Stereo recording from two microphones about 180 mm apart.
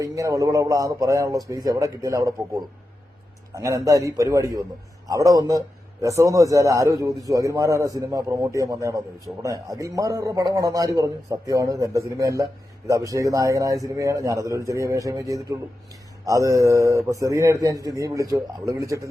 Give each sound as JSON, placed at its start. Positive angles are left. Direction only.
{"t": 0.0, "sound": "a man's voice", "side_deg": -20}
{"t": 3.5, "sound": "a man's voice", "side_deg": -20}